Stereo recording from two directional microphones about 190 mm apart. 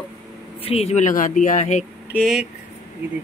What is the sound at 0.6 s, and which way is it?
Speech, 35° left (ahead or behind).